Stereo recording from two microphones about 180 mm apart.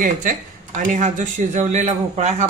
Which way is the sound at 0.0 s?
45° right (ahead or behind).